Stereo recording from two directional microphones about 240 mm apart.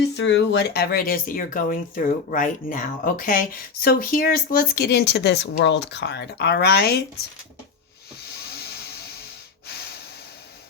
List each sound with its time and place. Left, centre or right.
0.0 s speech: left
8.3 s a sound: left
9.6 s snort: left